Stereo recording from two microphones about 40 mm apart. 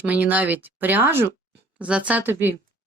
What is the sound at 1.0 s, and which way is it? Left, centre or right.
Speech, right.